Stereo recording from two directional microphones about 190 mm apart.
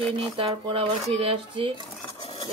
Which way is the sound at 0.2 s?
25° right (ahead or behind).